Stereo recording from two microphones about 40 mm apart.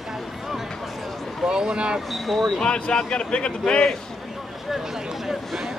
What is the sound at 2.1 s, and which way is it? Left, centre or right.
Speech, centre.